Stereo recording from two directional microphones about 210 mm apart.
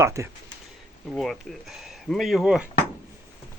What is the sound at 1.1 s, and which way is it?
Speech, centre (ahead or behind).